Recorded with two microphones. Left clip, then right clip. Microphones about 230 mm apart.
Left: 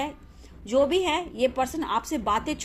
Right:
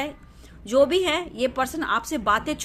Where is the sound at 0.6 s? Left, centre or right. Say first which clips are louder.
Right 3 dB; right.